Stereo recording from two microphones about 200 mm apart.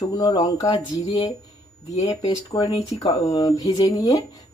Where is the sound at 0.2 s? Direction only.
20° left (ahead or behind).